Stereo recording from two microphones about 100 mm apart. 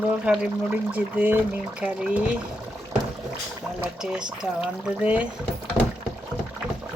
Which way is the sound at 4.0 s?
10° right (ahead or behind).